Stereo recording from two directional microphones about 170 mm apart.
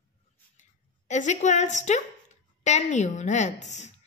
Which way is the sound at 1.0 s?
45° left (ahead or behind).